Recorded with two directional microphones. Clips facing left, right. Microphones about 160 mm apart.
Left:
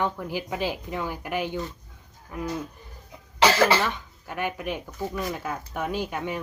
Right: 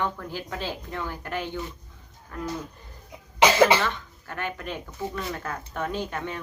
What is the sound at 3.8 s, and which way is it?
Speech, 15° left (ahead or behind).